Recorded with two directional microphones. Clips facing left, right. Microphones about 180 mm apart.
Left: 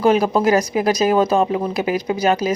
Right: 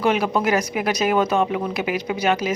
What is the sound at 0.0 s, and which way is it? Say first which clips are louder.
Speech: left 5 dB; 35° left (ahead or behind).